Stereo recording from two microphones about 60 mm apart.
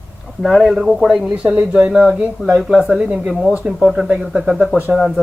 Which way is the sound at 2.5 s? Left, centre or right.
Centre.